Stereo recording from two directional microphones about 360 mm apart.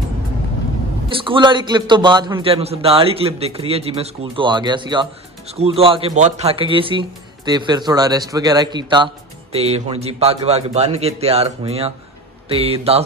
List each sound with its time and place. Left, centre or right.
1.0 s speech: centre